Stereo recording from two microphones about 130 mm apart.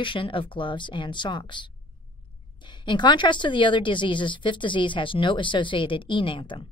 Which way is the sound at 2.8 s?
35° left (ahead or behind).